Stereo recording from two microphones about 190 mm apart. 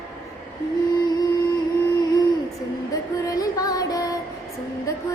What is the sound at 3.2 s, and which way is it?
Music, 20° left (ahead or behind).